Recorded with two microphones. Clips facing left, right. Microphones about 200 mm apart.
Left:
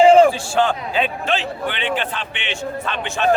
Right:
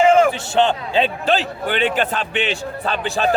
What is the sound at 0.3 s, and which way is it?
A man's voice, 25° right (ahead or behind).